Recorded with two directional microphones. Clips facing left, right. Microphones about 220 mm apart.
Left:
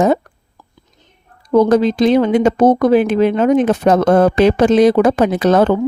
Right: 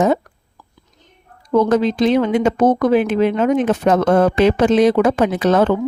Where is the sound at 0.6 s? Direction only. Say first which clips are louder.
Left 1 dB; 25° left (ahead or behind).